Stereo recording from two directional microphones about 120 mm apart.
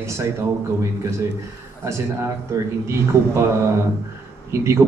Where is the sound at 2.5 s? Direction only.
25° right (ahead or behind).